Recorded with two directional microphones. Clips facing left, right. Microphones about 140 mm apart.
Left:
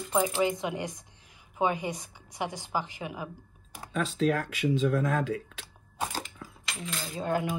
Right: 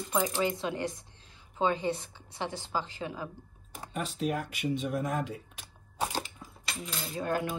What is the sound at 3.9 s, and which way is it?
Speech, 90° left.